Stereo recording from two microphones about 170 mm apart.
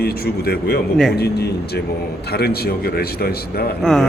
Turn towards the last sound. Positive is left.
turn(degrees=5)  # may be behind; listen again after turning